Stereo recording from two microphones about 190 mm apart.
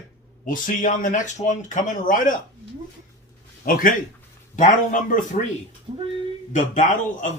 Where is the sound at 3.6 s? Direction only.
50° left (ahead or behind).